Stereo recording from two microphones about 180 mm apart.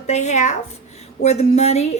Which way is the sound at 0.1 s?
40° left (ahead or behind).